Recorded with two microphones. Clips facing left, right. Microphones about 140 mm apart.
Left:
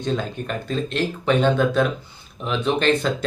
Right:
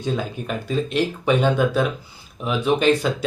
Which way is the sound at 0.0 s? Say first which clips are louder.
Even; 5° right (ahead or behind).